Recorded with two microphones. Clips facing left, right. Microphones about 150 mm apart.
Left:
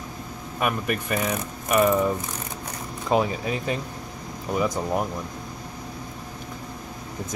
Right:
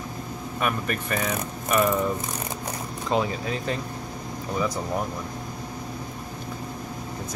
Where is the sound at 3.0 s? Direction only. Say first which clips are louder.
Left 3 dB; 10° left (ahead or behind).